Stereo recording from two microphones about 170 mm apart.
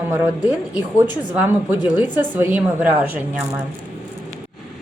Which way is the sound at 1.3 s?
10° right (ahead or behind).